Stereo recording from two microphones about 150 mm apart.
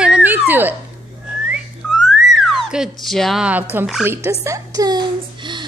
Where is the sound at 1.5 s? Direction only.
Centre (ahead or behind).